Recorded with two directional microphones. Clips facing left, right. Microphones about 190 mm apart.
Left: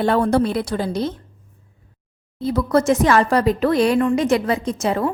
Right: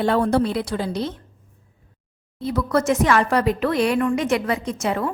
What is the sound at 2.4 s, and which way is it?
Speech, 35° left (ahead or behind).